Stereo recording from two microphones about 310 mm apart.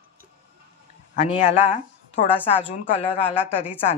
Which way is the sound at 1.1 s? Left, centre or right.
Centre.